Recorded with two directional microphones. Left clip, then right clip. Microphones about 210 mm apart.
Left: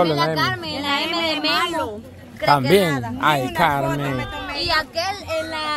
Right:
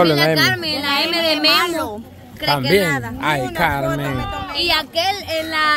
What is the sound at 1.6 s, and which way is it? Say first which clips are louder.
Speech: right 3 dB; 20° right (ahead or behind).